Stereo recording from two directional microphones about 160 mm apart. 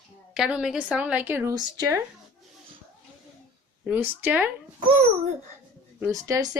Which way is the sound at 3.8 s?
10° right (ahead or behind).